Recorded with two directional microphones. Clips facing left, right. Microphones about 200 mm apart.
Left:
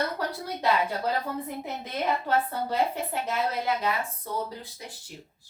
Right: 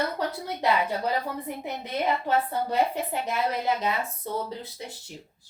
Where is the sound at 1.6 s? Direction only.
15° right (ahead or behind).